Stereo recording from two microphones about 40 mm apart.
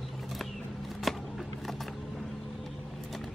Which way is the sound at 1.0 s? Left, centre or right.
Centre.